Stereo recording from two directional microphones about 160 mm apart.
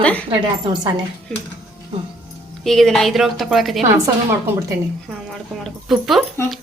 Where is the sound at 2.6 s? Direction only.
Centre (ahead or behind).